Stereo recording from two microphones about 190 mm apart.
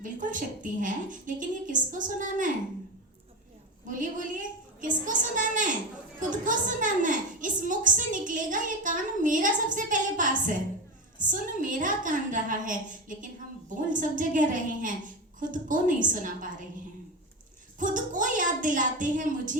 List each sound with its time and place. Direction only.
0.0 s a woman's voice: 45° right (ahead or behind)
3.8 s a woman's voice: 45° right (ahead or behind)
17.7 s a woman's voice: 45° right (ahead or behind)